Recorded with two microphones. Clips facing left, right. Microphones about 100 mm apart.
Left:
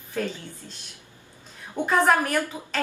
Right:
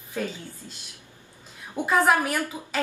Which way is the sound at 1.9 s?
10° right (ahead or behind).